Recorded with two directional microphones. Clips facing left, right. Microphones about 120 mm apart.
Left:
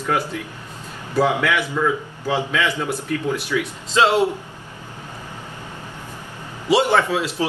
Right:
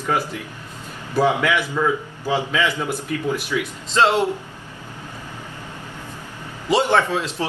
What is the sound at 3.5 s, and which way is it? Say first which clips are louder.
Speech: left 3 dB; 5° right (ahead or behind).